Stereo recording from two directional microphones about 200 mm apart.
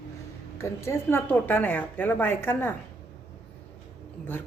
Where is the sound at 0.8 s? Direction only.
10° left (ahead or behind).